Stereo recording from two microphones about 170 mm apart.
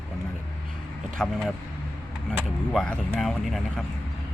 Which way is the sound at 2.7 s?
5° left (ahead or behind).